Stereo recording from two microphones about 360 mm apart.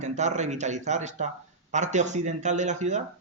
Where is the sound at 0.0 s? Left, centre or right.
Centre.